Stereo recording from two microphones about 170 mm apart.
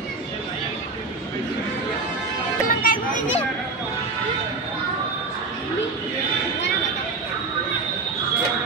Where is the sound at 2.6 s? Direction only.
55° left (ahead or behind).